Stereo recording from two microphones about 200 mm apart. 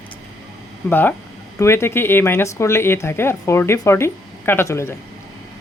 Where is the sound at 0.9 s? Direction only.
10° left (ahead or behind).